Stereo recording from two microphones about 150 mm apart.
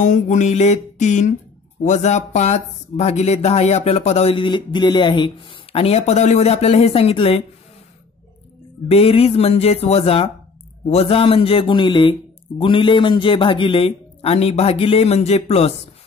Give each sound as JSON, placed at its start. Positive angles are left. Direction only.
{"t": 0.0, "sound": "speech", "side_deg": 55}
{"t": 8.9, "sound": "speech", "side_deg": 40}